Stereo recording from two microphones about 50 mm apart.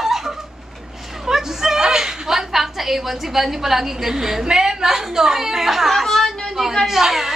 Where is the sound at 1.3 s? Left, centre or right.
Centre.